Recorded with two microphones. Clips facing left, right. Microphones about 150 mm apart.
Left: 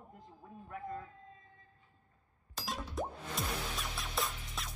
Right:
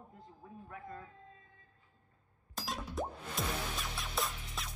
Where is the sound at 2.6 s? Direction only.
Centre (ahead or behind).